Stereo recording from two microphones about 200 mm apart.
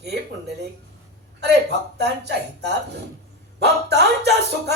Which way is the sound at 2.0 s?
55° right (ahead or behind).